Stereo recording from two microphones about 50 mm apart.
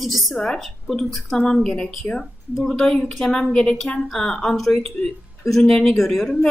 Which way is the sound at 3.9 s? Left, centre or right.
Centre.